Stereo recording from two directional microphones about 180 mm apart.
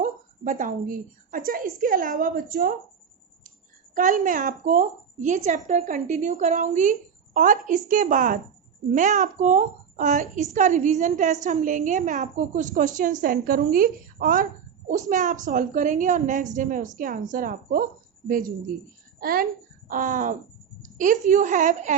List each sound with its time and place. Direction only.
0.0 s a woman's voice: 45° right (ahead or behind)
3.9 s a woman's voice: 45° right (ahead or behind)